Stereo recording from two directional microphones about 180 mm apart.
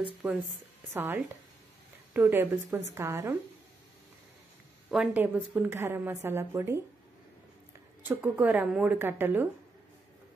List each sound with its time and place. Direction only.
0.2 s a woman's voice: 5° right (ahead or behind)
4.9 s a woman's voice: 5° right (ahead or behind)
8.0 s a woman's voice: 10° right (ahead or behind)